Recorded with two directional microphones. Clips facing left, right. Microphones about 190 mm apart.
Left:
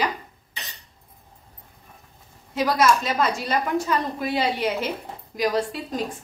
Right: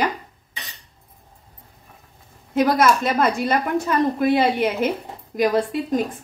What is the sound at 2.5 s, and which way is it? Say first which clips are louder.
A woman's voice: right 3 dB; 55° right (ahead or behind).